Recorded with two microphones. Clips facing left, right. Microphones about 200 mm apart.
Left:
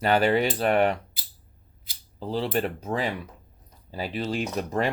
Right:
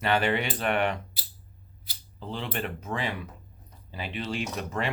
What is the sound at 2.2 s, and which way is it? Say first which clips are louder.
Speech: left 7 dB; 35° left (ahead or behind).